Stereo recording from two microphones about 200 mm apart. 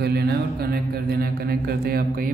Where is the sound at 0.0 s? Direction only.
55° right (ahead or behind).